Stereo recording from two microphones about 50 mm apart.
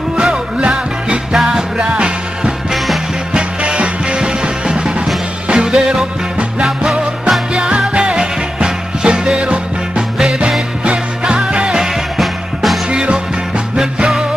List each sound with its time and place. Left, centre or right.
0.1 s music: centre
10.1 s music: centre
12.9 s music: centre